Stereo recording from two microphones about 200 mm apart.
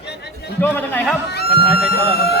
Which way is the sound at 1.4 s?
50° left (ahead or behind).